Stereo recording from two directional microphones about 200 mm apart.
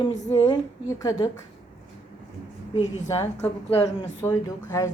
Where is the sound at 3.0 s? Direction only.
15° left (ahead or behind).